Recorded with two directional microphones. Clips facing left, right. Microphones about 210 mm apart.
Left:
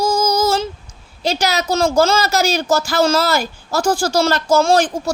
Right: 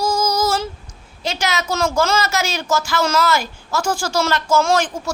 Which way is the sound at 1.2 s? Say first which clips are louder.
Left 4 dB; 35° left (ahead or behind).